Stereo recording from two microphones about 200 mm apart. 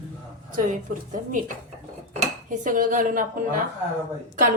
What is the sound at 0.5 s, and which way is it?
A woman's voice, 40° right (ahead or behind).